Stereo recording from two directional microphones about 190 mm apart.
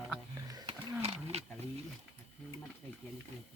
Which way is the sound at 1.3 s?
35° right (ahead or behind).